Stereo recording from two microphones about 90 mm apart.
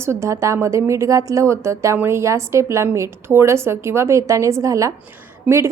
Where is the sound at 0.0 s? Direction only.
30° right (ahead or behind).